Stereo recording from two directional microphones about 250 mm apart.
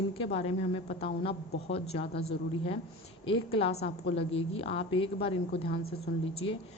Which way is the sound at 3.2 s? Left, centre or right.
Left.